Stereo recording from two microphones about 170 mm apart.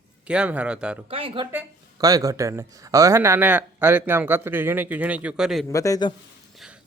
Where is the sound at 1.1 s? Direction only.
30° right (ahead or behind).